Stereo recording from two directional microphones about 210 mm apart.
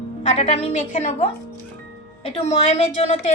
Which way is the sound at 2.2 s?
30° left (ahead or behind).